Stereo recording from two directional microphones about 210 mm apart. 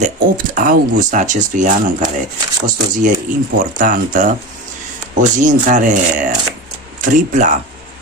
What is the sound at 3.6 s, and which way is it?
Speech, 40° right (ahead or behind).